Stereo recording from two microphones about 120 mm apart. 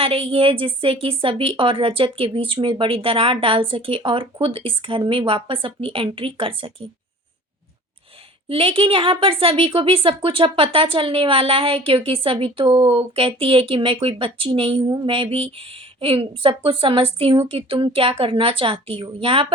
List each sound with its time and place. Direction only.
0.0 s a woman's voice: 50° right (ahead or behind)
8.4 s a woman's voice: 50° right (ahead or behind)